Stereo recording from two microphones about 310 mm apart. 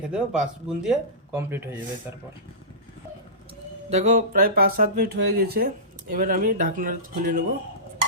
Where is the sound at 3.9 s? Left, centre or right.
Right.